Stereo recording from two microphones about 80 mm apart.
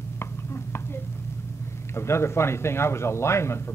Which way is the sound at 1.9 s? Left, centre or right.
Left.